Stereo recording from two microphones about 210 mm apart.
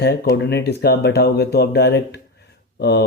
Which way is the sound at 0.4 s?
50° left (ahead or behind).